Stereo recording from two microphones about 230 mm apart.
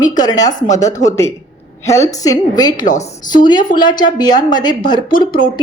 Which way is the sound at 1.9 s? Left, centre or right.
Centre.